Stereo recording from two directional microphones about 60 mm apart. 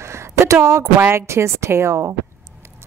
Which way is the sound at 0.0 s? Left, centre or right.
Right.